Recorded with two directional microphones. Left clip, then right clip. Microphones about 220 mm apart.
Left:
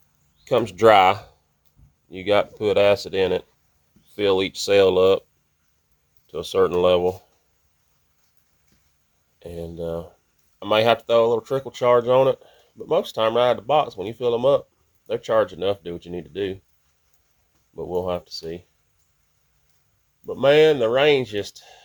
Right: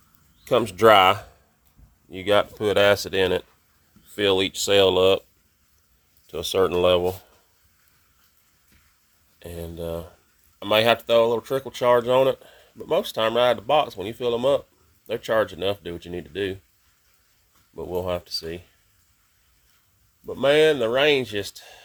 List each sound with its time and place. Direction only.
0.4 s speech: 15° right (ahead or behind)
6.2 s speech: 15° right (ahead or behind)
9.4 s speech: 10° right (ahead or behind)
17.7 s speech: 10° right (ahead or behind)
20.2 s speech: 5° right (ahead or behind)